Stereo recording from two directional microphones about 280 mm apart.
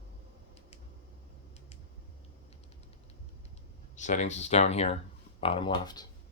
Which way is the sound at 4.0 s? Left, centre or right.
Left.